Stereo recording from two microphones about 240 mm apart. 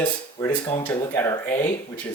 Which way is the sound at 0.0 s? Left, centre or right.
Centre.